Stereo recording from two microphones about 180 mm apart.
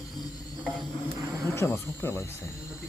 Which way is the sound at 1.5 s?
15° left (ahead or behind).